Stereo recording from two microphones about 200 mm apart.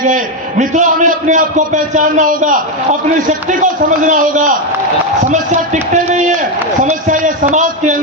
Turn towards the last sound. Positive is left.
turn(degrees=-40)  # may be behind; listen again after turning